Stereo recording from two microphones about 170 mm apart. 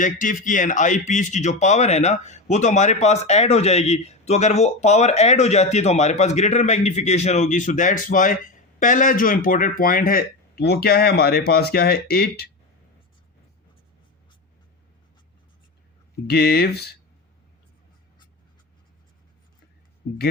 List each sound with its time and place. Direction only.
0.0 s speech: 50° left (ahead or behind)
16.2 s speech: 70° left (ahead or behind)